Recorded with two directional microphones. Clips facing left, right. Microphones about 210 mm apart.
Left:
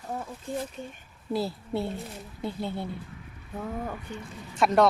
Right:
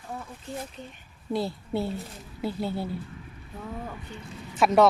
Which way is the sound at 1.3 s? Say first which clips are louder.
Even; centre (ahead or behind).